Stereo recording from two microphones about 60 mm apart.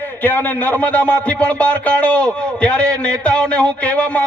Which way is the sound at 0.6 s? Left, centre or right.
Left.